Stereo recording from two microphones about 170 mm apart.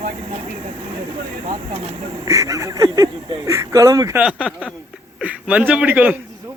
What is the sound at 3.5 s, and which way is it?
Speech, 20° right (ahead or behind).